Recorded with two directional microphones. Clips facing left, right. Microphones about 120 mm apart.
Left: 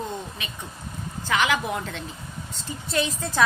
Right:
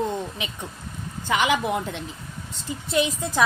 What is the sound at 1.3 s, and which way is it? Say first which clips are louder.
A woman's voice: right 2 dB; 20° right (ahead or behind).